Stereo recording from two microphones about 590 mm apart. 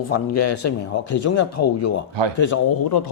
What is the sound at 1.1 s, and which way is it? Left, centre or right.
Speech, left.